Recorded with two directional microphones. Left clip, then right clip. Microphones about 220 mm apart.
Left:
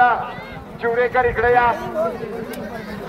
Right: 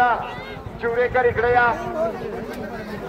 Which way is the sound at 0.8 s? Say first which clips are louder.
Left 2 dB; 15° left (ahead or behind).